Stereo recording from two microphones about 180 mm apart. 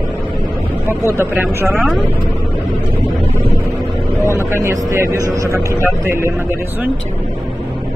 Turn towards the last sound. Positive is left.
turn(degrees=-15)  # may be behind; listen again after turning